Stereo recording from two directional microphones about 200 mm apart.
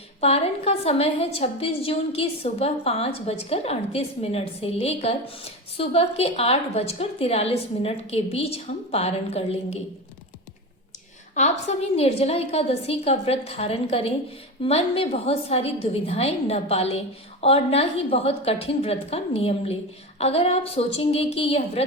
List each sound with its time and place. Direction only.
0.2 s a woman's voice: 30° left (ahead or behind)
11.3 s a woman's voice: 35° left (ahead or behind)